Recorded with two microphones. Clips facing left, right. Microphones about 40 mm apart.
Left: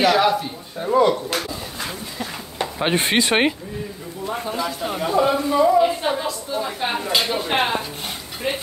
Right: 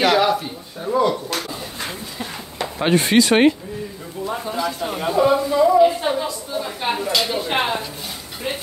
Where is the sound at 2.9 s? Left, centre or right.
Left.